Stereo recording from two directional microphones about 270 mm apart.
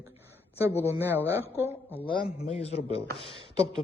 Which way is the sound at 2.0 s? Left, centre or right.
Left.